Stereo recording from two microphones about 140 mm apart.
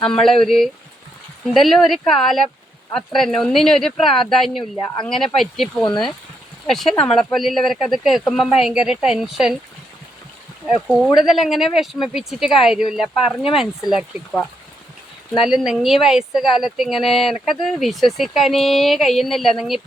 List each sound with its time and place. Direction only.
0.0 s speech: 5° left (ahead or behind)
5.8 s speech: 30° left (ahead or behind)
6.7 s speech: centre (ahead or behind)
6.9 s speech: 35° left (ahead or behind)
7.2 s speech: centre (ahead or behind)
10.7 s speech: centre (ahead or behind)
15.4 s speech: 5° right (ahead or behind)